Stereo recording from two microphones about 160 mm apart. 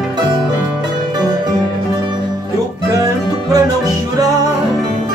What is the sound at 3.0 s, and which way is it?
Music, 25° right (ahead or behind).